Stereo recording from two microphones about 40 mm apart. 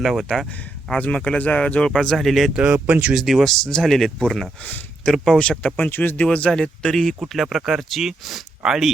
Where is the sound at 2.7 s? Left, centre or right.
Right.